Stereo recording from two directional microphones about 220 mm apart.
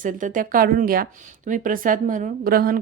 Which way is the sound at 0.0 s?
35° right (ahead or behind).